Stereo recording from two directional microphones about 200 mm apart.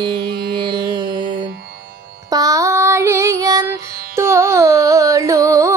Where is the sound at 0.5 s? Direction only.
25° right (ahead or behind).